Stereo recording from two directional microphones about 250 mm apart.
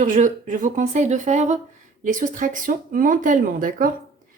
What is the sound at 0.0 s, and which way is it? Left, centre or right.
Speech, right.